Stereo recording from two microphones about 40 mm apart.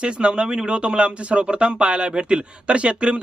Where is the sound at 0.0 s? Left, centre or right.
Right.